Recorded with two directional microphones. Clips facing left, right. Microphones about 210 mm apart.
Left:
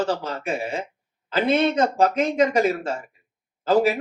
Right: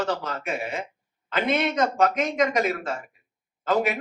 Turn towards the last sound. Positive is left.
turn(degrees=30)  # may be behind; listen again after turning